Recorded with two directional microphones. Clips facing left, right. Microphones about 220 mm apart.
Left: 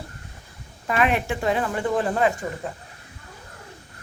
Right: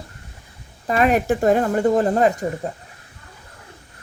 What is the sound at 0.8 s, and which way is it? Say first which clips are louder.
Speech: right 5 dB; 40° right (ahead or behind).